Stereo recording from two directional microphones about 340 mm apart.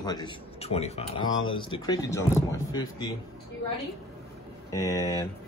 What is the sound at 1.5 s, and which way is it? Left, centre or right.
Speech, centre.